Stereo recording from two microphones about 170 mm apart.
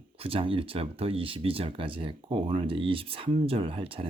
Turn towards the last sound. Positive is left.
turn(degrees=-35)  # may be behind; listen again after turning